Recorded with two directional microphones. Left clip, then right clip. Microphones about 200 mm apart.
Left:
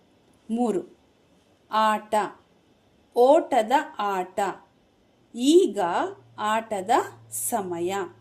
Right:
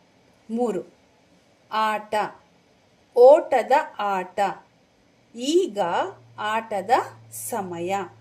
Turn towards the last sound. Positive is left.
turn(degrees=30)  # may be behind; listen again after turning